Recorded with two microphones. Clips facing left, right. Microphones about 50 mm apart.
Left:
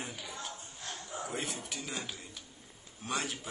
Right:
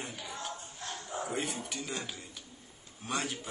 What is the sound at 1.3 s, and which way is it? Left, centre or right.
Speech, centre.